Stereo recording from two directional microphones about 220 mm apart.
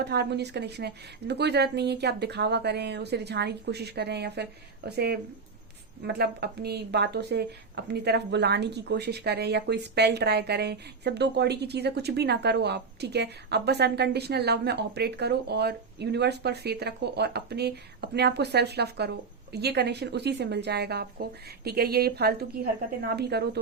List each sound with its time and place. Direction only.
0.0 s speech: 50° right (ahead or behind)